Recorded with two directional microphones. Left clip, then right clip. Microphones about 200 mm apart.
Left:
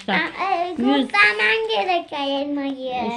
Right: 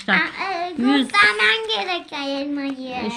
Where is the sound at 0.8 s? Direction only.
40° right (ahead or behind).